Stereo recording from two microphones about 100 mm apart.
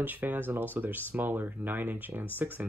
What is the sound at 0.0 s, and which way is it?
Speech, 20° right (ahead or behind).